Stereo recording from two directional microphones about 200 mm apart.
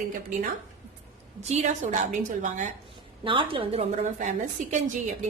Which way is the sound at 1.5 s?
35° right (ahead or behind).